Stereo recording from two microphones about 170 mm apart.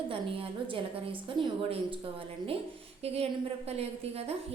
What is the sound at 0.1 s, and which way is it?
A woman's voice, 30° right (ahead or behind).